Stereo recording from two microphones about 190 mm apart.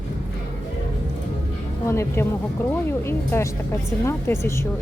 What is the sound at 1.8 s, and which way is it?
Speech, 15° left (ahead or behind).